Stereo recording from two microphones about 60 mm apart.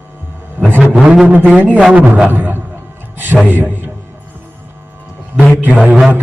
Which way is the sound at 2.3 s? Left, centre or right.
Right.